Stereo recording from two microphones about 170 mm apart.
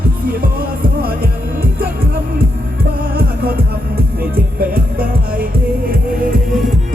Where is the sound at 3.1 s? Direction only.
65° right (ahead or behind).